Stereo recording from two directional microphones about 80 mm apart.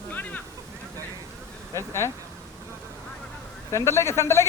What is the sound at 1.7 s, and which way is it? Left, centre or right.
Speech, left.